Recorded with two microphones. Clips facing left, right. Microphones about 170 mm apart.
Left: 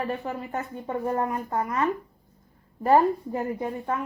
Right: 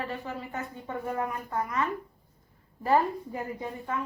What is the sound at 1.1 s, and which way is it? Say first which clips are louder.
Speech: left 3 dB; 45° left (ahead or behind).